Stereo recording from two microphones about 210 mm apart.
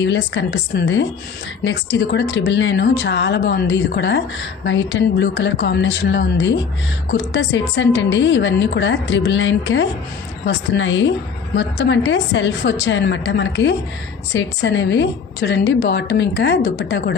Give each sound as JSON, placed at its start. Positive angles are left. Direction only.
{"t": 0.0, "sound": "speech", "side_deg": 60}